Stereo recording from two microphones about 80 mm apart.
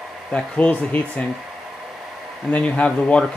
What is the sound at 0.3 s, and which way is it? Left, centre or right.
Speech, centre.